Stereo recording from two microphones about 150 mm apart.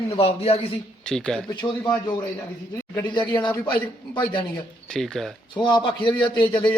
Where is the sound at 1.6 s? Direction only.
30° left (ahead or behind).